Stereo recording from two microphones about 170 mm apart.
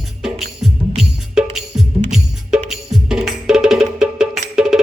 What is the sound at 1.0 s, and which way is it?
Music, centre (ahead or behind).